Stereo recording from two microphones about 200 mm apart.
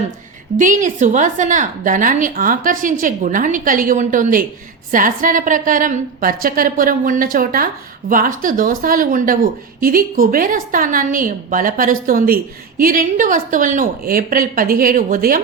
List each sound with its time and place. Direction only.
0.6 s a woman's voice: 40° right (ahead or behind)